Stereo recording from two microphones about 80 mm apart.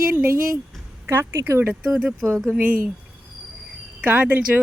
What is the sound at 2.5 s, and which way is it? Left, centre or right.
Speech, right.